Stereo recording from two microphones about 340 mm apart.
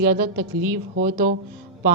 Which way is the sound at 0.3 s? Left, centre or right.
Right.